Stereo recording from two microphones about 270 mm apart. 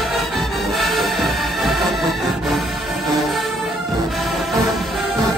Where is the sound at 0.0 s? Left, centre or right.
Centre.